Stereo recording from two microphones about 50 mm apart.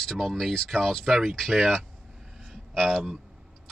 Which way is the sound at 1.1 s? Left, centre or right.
Centre.